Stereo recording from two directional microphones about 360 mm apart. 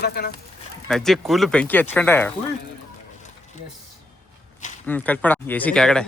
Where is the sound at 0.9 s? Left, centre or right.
Centre.